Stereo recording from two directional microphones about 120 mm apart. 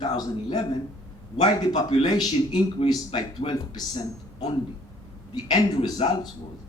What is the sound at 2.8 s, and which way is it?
Speech, 55° left (ahead or behind).